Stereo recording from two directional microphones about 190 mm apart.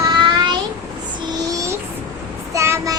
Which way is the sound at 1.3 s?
15° right (ahead or behind).